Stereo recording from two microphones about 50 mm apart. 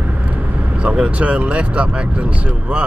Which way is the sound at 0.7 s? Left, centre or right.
Right.